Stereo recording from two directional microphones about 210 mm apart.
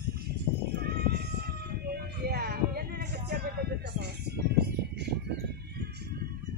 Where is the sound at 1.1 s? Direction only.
50° right (ahead or behind).